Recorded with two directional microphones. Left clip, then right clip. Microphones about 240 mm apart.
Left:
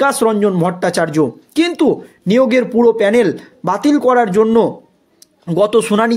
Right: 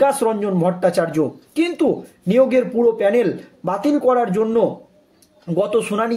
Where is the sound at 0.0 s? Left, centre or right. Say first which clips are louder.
Left 4 dB; left.